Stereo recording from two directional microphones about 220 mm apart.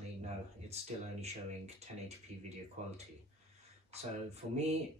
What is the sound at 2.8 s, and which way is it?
Speech, 30° right (ahead or behind).